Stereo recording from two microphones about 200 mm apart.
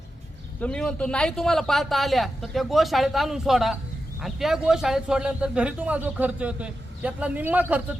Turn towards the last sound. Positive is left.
turn(degrees=-10)  # may be behind; listen again after turning